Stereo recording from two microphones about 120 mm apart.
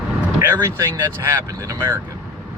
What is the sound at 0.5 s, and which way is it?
Speech, 25° right (ahead or behind).